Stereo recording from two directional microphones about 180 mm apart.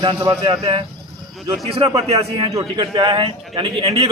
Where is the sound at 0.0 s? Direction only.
20° right (ahead or behind).